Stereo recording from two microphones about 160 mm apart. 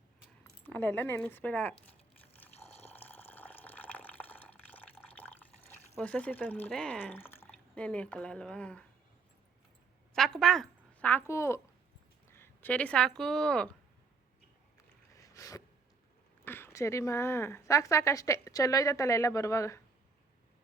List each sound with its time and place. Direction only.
0.6 s speech: 10° left (ahead or behind)
2.6 s water: 40° left (ahead or behind)
2.9 s water: 10° left (ahead or behind)
6.0 s speech: 5° left (ahead or behind)
10.2 s a woman's voice: centre (ahead or behind)
15.1 s a sound: 20° left (ahead or behind)
16.4 s a woman's voice: 15° left (ahead or behind)